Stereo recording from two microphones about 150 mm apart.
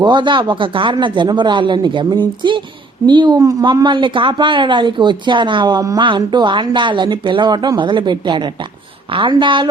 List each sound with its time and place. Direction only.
0.0 s a woman's voice: 30° right (ahead or behind)